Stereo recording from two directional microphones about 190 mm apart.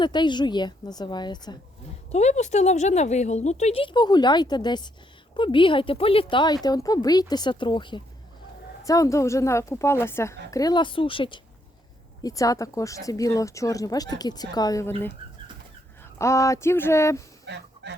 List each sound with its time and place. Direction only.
0.0 s a woman's voice: 25° left (ahead or behind)
2.1 s a woman's voice: 35° left (ahead or behind); by 15.1 s 15° left (ahead or behind)
16.1 s speech: 15° left (ahead or behind)
17.4 s a sound: 65° right (ahead or behind)